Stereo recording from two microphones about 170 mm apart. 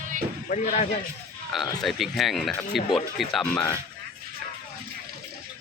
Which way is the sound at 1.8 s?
Centre (ahead or behind).